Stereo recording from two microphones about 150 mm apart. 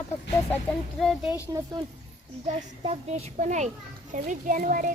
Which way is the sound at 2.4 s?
45° right (ahead or behind).